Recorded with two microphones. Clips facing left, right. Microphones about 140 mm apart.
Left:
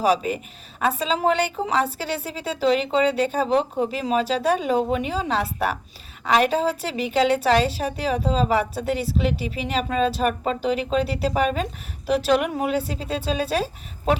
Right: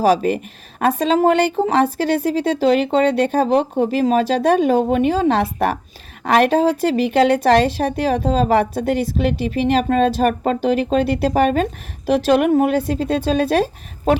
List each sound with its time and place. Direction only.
0.0 s speech: 45° right (ahead or behind)